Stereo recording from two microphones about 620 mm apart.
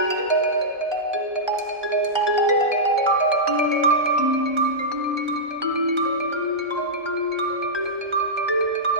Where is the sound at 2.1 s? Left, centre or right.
Right.